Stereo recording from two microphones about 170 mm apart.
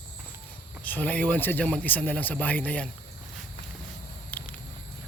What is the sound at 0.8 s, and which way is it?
Speech, 10° left (ahead or behind).